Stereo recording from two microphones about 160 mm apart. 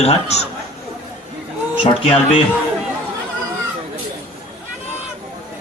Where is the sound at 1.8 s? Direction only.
35° left (ahead or behind).